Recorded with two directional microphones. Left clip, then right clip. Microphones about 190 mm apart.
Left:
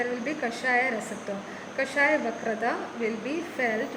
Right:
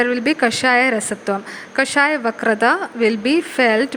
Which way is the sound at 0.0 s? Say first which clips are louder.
Right 13 dB; 30° right (ahead or behind).